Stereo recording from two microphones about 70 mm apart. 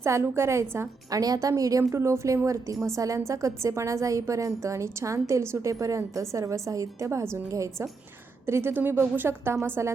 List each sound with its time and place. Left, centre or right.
0.0 s a woman's voice: right
1.1 s a woman's voice: right
1.9 s a woman's voice: right